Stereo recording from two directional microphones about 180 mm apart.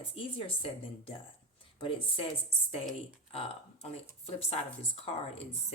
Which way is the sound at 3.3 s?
35° left (ahead or behind).